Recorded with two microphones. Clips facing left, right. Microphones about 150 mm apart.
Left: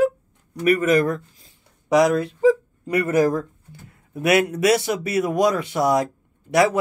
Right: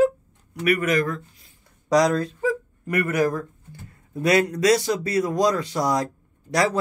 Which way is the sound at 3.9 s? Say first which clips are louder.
Left 1 dB; 20° left (ahead or behind).